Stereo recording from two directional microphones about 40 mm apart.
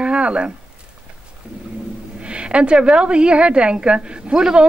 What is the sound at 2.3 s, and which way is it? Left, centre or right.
A man's voice, right.